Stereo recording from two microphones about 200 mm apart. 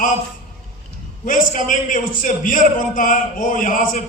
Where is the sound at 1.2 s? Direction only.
40° left (ahead or behind).